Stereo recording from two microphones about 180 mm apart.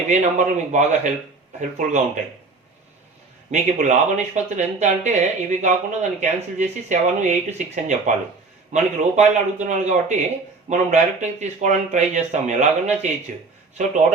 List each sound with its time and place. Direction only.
0.1 s speech: 40° right (ahead or behind)
3.5 s speech: 40° right (ahead or behind)